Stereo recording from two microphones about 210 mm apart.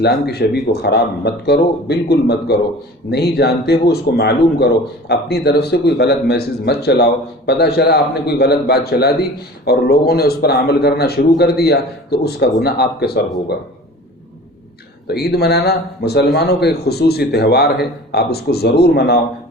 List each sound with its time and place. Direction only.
0.0 s speech: 50° left (ahead or behind)
15.0 s speech: 50° left (ahead or behind)